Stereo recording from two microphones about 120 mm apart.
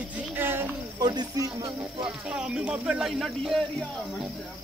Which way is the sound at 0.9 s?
35° right (ahead or behind).